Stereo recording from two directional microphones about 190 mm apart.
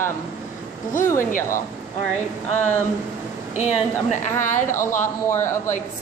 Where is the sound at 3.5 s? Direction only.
35° left (ahead or behind).